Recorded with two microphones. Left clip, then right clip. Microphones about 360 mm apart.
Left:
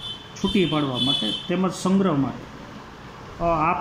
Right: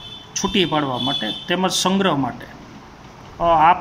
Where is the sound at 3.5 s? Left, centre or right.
Right.